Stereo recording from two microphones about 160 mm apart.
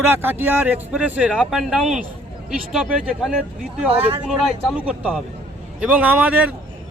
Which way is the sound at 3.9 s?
40° right (ahead or behind).